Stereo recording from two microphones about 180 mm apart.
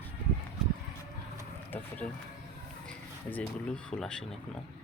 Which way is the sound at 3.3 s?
5° left (ahead or behind).